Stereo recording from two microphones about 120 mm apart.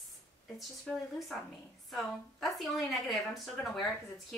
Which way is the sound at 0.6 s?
Centre (ahead or behind).